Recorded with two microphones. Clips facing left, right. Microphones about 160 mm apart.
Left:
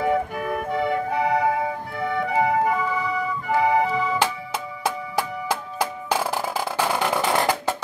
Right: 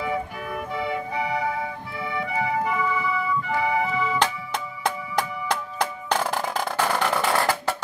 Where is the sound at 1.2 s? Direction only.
50° left (ahead or behind).